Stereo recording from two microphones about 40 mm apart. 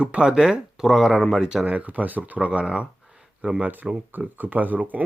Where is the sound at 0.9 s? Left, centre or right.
Centre.